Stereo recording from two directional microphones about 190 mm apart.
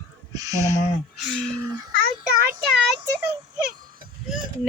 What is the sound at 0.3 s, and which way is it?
Speech, 15° right (ahead or behind).